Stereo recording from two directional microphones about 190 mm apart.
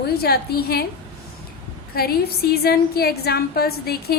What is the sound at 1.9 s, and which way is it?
A woman's voice, 55° left (ahead or behind).